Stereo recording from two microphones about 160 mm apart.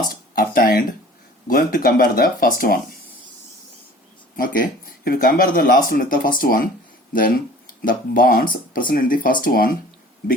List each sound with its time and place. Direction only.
0.1 s speech: 60° left (ahead or behind)
4.4 s speech: 60° left (ahead or behind)